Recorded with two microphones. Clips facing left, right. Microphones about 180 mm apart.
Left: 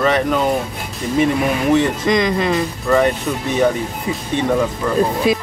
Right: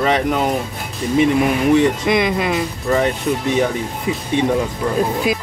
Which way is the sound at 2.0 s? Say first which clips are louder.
Left 1 dB; 10° right (ahead or behind).